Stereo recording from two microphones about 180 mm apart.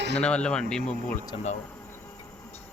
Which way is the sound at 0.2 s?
5° left (ahead or behind).